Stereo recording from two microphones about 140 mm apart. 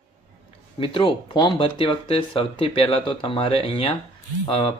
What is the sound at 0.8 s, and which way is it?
Speech, 35° left (ahead or behind).